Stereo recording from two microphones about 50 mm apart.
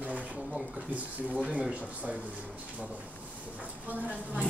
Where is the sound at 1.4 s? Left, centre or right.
Right.